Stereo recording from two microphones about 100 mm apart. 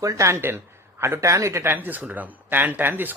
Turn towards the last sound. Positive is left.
turn(degrees=-20)  # may be behind; listen again after turning